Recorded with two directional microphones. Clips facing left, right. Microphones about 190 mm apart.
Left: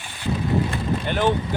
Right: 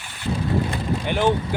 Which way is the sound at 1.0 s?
15° right (ahead or behind).